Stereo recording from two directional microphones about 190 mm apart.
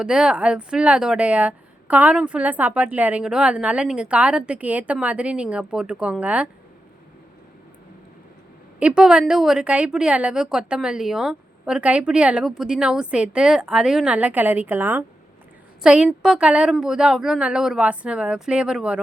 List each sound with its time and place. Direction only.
0.0 s speech: 5° right (ahead or behind)
8.8 s a woman's voice: 5° right (ahead or behind)